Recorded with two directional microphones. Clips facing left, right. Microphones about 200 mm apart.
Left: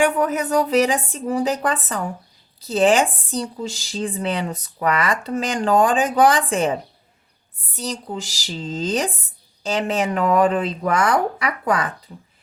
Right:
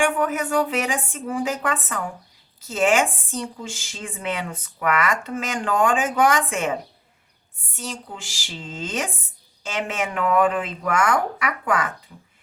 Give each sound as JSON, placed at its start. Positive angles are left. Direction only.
{"t": 0.0, "sound": "speech", "side_deg": 40}
{"t": 7.8, "sound": "speech", "side_deg": 40}